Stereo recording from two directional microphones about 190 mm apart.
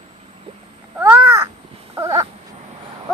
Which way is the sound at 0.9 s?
10° right (ahead or behind).